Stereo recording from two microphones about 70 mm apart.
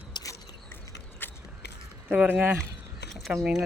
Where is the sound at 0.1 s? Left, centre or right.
Left.